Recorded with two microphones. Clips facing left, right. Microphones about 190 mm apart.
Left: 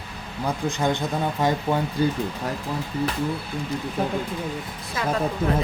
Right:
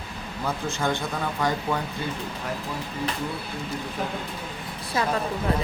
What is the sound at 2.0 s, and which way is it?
Speech, 40° left (ahead or behind).